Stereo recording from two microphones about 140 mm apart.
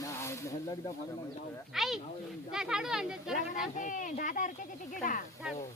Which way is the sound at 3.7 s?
65° left (ahead or behind).